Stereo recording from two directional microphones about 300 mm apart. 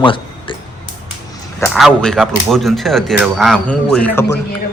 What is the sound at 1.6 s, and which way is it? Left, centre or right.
Speech, centre.